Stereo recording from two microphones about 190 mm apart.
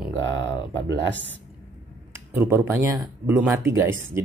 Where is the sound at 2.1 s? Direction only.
15° right (ahead or behind).